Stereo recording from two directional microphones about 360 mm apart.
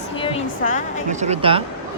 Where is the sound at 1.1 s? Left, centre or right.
Centre.